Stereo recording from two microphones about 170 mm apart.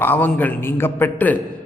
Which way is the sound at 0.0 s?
10° left (ahead or behind).